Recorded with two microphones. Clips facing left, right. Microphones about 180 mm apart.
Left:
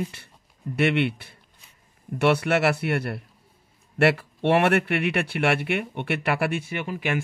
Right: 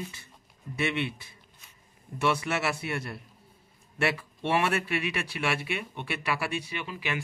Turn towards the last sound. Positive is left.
turn(degrees=50)  # may be behind; listen again after turning